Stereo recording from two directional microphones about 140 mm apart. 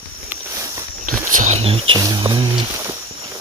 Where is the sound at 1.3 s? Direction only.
60° right (ahead or behind); by 2.0 s 40° right (ahead or behind).